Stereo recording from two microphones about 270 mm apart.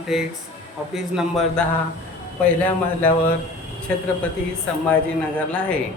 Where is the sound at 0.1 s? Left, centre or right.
Centre.